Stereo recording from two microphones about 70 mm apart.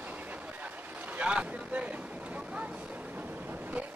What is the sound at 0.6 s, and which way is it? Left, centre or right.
Boat, right.